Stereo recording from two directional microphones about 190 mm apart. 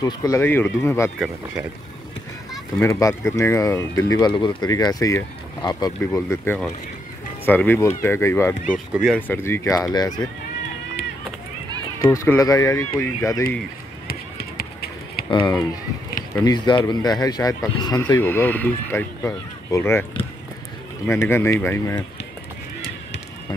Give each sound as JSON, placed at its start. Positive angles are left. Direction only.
{"t": 0.0, "sound": "speech", "side_deg": 20}
{"t": 2.8, "sound": "speech", "side_deg": 15}
{"t": 8.7, "sound": "speech", "side_deg": 0}
{"t": 9.3, "sound": "speech", "side_deg": 15}
{"t": 12.1, "sound": "speech", "side_deg": 15}
{"t": 14.6, "sound": "a sound", "side_deg": 55}
{"t": 15.2, "sound": "speech", "side_deg": 25}
{"t": 21.1, "sound": "speech", "side_deg": 15}